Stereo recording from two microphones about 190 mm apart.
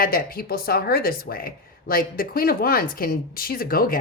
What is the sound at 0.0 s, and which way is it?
Speech, 50° left (ahead or behind).